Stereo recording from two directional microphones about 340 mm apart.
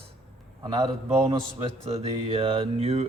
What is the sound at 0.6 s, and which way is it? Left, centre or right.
Speech, centre.